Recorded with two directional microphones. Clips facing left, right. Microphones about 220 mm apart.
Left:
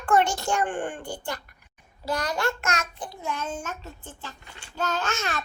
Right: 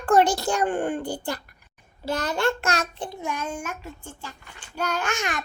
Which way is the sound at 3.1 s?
15° right (ahead or behind).